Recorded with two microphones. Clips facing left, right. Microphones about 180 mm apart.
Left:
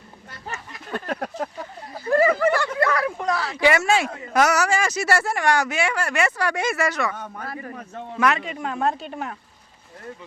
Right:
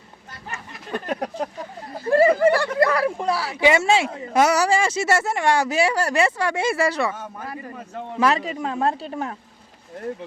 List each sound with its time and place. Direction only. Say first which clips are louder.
0.9 s a sound: right 2 dB; 15° right (ahead or behind)
2.0 s a sound: right 3 dB; 30° right (ahead or behind)
3.2 s a man's voice: right 1 dB; 10° right (ahead or behind)
3.6 s speech: right 2 dB; 25° right (ahead or behind)
7.1 s a man's voice: right 1 dB; 10° right (ahead or behind)
8.2 s speech: right 2 dB; 35° right (ahead or behind)